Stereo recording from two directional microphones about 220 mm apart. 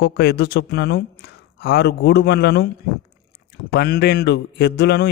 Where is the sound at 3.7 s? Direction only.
45° left (ahead or behind).